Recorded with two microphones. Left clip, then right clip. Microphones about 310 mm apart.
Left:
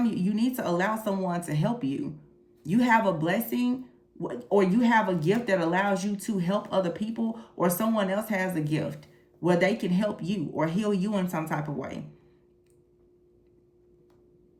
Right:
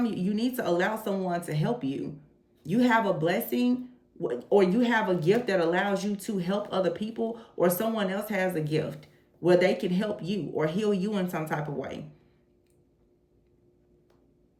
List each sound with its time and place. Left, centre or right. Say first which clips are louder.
0.0 s speech: left 1 dB; centre